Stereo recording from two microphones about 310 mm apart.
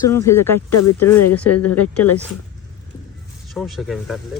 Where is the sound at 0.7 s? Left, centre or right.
Left.